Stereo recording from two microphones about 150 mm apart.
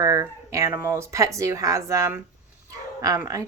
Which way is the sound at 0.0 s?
20° right (ahead or behind).